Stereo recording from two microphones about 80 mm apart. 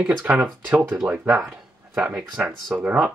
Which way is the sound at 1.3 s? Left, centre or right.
Centre.